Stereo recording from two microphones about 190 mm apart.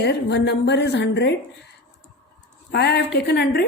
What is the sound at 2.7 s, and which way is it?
Speech, 65° left (ahead or behind).